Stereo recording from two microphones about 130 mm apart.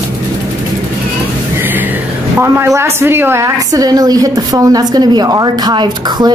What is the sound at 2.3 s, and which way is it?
A woman's voice, 20° right (ahead or behind).